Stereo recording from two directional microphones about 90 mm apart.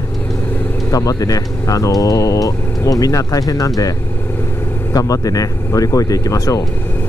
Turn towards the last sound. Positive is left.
turn(degrees=40)  # may be behind; listen again after turning